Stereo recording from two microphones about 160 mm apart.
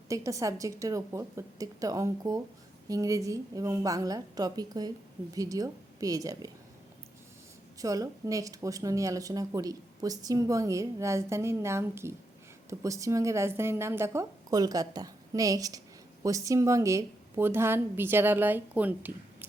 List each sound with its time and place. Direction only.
0.1 s speech: 20° right (ahead or behind)
7.8 s a woman's voice: 20° right (ahead or behind)